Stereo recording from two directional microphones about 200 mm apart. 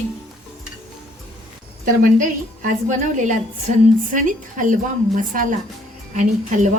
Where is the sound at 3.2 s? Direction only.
40° right (ahead or behind).